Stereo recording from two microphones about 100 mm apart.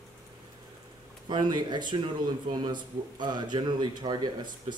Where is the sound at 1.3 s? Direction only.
45° right (ahead or behind).